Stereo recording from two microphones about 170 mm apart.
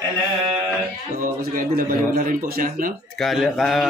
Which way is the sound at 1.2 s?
55° right (ahead or behind).